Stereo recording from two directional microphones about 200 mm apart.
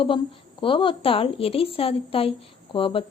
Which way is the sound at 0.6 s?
25° left (ahead or behind).